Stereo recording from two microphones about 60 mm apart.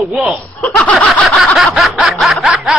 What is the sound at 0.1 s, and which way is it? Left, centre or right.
Speech, centre.